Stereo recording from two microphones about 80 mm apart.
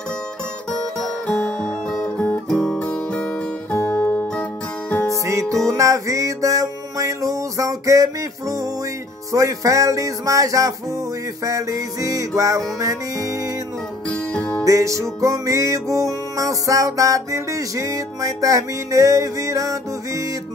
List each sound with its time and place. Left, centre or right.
1.2 s guitar: centre
3.8 s music: left
5.2 s music: right
14.6 s music: right